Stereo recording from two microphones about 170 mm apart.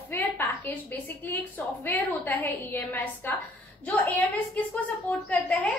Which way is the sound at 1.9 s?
10° left (ahead or behind).